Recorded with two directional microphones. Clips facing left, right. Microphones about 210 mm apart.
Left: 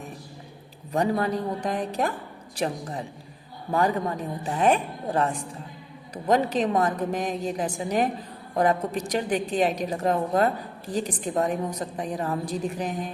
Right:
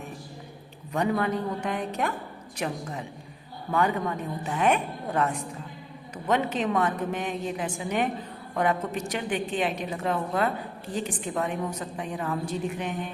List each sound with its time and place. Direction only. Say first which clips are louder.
0.9 s a woman's voice: left 2 dB; 35° left (ahead or behind)